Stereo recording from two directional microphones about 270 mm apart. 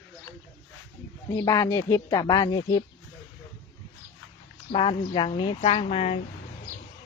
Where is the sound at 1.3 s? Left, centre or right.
Centre.